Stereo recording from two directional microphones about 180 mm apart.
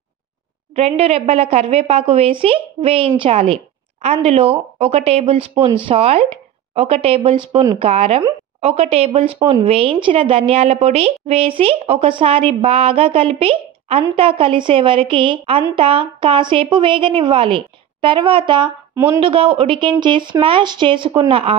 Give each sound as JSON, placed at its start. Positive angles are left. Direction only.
{"t": 0.7, "sound": "a woman's voice", "side_deg": -35}